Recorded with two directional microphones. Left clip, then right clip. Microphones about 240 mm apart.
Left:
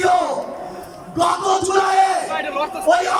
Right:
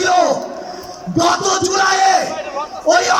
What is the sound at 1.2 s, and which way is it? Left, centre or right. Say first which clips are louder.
Music: right 2 dB; right.